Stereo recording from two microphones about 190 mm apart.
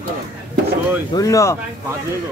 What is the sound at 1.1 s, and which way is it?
Speech, 15° left (ahead or behind).